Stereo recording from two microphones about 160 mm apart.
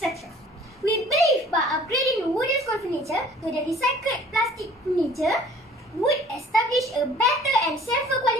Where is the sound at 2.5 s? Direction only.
20° left (ahead or behind).